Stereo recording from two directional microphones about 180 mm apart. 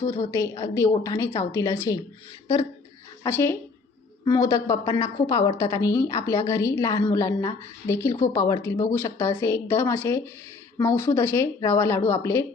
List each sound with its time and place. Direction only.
0.1 s a woman's voice: 15° left (ahead or behind)
3.2 s a woman's voice: 15° left (ahead or behind)